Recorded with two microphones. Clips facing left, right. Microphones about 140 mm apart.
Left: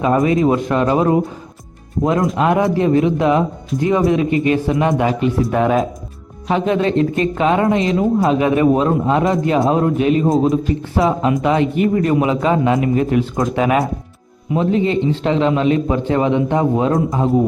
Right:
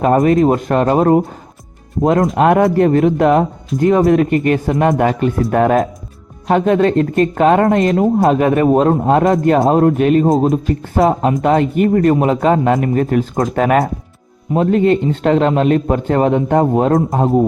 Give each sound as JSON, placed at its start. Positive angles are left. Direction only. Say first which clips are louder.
{"t": 0.0, "sound": "speech", "louder": "right 3 dB", "side_deg": -45}
{"t": 2.3, "sound": "speech", "louder": "right 4 dB", "side_deg": -55}
{"t": 10.2, "sound": "a man's voice", "louder": "right 2 dB", "side_deg": 0}
{"t": 11.0, "sound": "speech", "louder": "right 3 dB", "side_deg": -45}
{"t": 14.5, "sound": "speech", "louder": "right 3 dB", "side_deg": -50}